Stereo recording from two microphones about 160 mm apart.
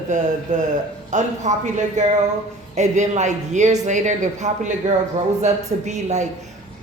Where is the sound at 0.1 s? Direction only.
50° right (ahead or behind).